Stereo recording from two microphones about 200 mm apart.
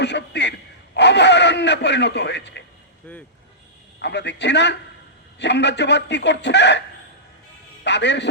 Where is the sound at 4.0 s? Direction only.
60° left (ahead or behind).